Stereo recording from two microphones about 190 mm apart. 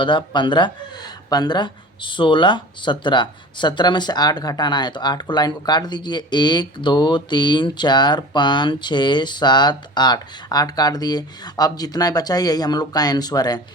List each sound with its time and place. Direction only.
0.0 s speech: 25° left (ahead or behind)